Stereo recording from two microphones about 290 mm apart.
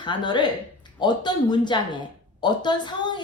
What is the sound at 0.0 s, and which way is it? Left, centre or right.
Speech, centre.